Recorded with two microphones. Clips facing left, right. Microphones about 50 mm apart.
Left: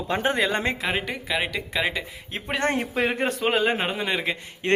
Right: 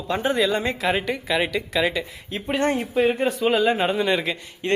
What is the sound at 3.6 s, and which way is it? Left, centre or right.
Speech, left.